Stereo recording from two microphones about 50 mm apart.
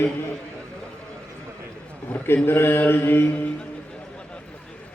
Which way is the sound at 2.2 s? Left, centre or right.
Left.